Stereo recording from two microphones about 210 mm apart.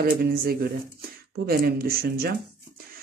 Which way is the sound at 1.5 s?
45° right (ahead or behind).